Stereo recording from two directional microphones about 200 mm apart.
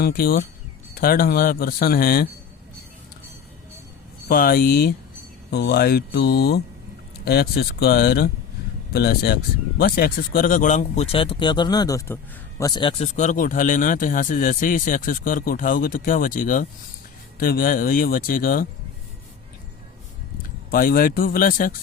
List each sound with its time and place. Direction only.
0.0 s speech: 50° left (ahead or behind)
4.3 s speech: 50° left (ahead or behind)
20.7 s speech: 45° left (ahead or behind)